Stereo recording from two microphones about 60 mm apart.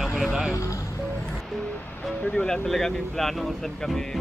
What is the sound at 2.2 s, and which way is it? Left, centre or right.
Speech, left.